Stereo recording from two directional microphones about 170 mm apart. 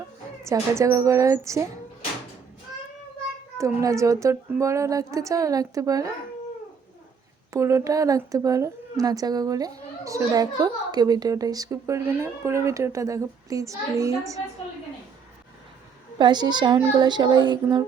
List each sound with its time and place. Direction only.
0.4 s a woman's voice: 15° right (ahead or behind)
3.6 s a woman's voice: 20° right (ahead or behind)
7.5 s a woman's voice: 15° right (ahead or behind)
16.1 s a woman's voice: 25° right (ahead or behind)